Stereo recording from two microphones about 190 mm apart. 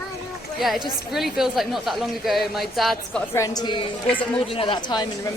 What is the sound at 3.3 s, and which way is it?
Speech, 20° left (ahead or behind).